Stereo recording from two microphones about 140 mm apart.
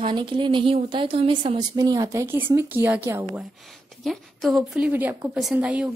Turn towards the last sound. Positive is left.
turn(degrees=-10)  # may be behind; listen again after turning